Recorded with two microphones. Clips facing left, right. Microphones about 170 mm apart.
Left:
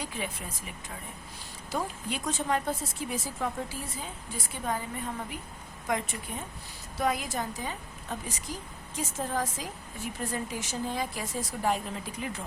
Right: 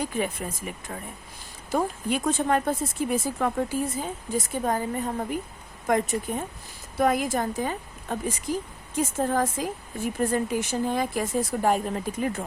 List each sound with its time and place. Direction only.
0.0 s speech: 50° right (ahead or behind)
1.7 s speech: 55° right (ahead or behind)